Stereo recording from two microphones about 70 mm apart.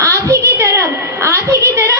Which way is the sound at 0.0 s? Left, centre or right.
Right.